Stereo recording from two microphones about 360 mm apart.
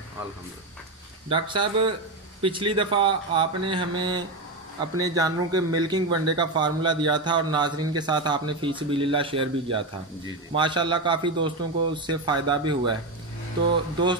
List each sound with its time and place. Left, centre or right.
1.3 s a man's voice: centre